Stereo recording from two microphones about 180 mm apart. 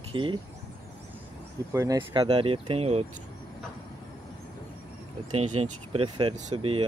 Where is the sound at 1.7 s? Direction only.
20° right (ahead or behind).